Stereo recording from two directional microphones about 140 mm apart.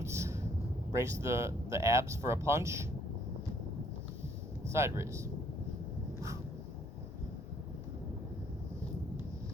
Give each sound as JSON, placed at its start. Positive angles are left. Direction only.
{"t": 0.0, "sound": "a sound", "side_deg": -20}
{"t": 0.9, "sound": "speech", "side_deg": -20}
{"t": 4.7, "sound": "speech", "side_deg": -20}